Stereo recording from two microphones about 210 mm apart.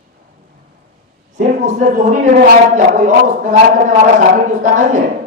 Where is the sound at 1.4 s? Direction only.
35° right (ahead or behind).